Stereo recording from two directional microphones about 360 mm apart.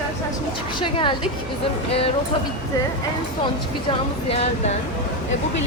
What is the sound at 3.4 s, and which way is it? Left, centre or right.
Speech, centre.